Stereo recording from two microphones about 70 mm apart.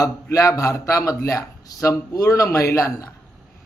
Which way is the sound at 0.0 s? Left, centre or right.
Left.